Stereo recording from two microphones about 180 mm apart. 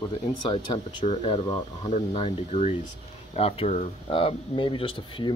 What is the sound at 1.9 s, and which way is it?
Speech, 35° left (ahead or behind).